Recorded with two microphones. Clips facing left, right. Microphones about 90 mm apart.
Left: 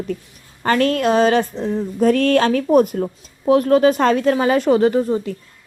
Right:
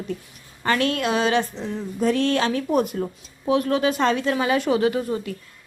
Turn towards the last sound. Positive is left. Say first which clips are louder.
# left 6 dB
turn(degrees=40)  # may be behind; listen again after turning